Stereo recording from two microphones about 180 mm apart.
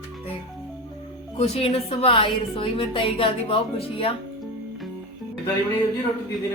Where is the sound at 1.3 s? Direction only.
35° left (ahead or behind).